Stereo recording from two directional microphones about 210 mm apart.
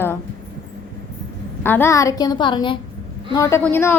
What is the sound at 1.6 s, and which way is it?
A woman's voice, 10° left (ahead or behind).